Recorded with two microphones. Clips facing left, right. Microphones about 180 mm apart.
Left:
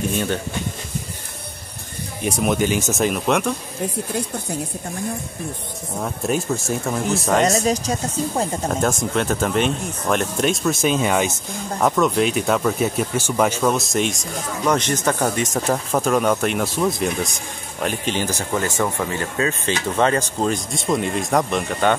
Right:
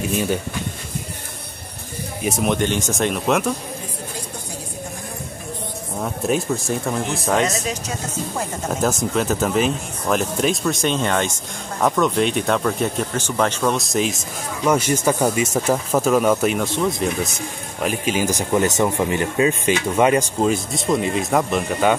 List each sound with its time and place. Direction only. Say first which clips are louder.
0.1 s speech: right 1 dB; 5° right (ahead or behind)
2.2 s speech: even; centre (ahead or behind)
5.9 s speech: right 1 dB; centre (ahead or behind)
7.6 s speech: left 7 dB; 35° left (ahead or behind)
8.6 s speech: even; centre (ahead or behind)
16.6 s speech: even; 10° left (ahead or behind)
17.8 s speech: right 2 dB; 5° right (ahead or behind)